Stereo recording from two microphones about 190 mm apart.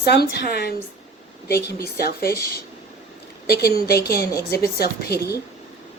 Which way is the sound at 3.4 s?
55° left (ahead or behind).